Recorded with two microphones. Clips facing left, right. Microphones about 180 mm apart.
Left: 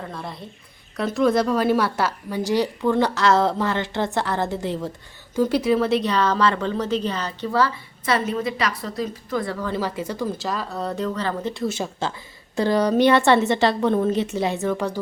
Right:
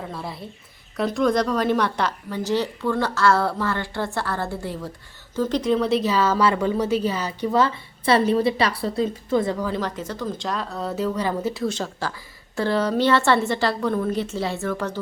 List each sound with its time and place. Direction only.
0.0 s a sound: 5° right (ahead or behind)
0.9 s a woman's voice: centre (ahead or behind); by 4.9 s 20° left (ahead or behind)
5.3 s speech: 10° left (ahead or behind); by 7.5 s 10° right (ahead or behind)
7.5 s a woman's voice: 25° right (ahead or behind)
9.6 s a woman's voice: 5° right (ahead or behind)
9.8 s a woman's voice: 10° left (ahead or behind); by 11.7 s 5° right (ahead or behind)
12.0 s a woman's voice: 25° left (ahead or behind)